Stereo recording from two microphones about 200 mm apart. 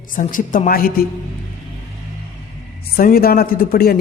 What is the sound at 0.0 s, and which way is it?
A woman's voice, 40° left (ahead or behind).